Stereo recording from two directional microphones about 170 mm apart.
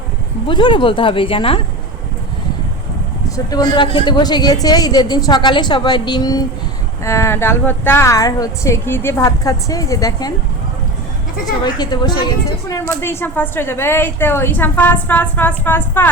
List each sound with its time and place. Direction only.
0.4 s speech: 30° left (ahead or behind)
3.2 s a woman's voice: 20° left (ahead or behind)
11.6 s a woman's voice: 25° left (ahead or behind)